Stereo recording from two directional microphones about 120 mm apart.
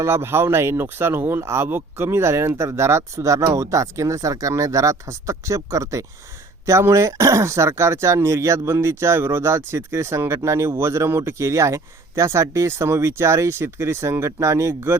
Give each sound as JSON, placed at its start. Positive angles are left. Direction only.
{"t": 0.0, "sound": "speech", "side_deg": -20}